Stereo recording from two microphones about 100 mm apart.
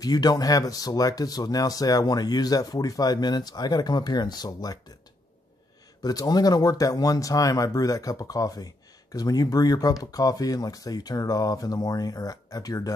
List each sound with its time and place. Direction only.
0.0 s speech: 40° left (ahead or behind)
6.0 s speech: 40° left (ahead or behind)